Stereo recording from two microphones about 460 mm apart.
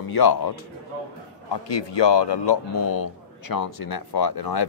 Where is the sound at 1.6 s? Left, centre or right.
Left.